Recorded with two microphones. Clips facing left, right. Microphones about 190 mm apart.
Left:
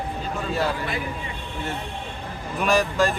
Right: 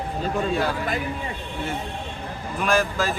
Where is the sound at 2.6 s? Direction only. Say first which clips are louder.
Left 2 dB; centre (ahead or behind).